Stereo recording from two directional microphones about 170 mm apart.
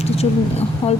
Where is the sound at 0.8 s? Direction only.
30° left (ahead or behind).